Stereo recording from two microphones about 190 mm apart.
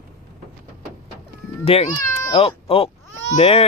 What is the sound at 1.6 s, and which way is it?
Speech, 30° left (ahead or behind).